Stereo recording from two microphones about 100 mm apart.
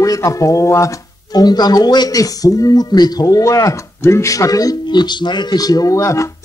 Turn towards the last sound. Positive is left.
turn(degrees=30)  # may be behind; listen again after turning